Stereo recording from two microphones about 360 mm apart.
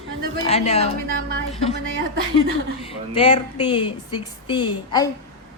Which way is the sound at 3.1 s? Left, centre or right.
Centre.